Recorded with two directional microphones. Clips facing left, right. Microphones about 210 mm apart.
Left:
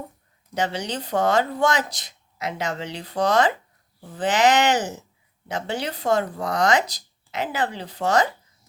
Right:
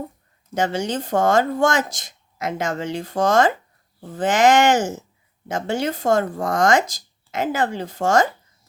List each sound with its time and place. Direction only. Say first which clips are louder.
0.5 s speech: right 4 dB; 45° right (ahead or behind)